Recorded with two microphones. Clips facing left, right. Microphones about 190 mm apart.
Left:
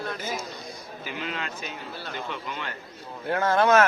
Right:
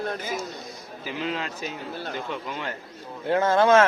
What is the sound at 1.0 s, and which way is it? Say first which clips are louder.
Speech: right 4 dB; 30° right (ahead or behind).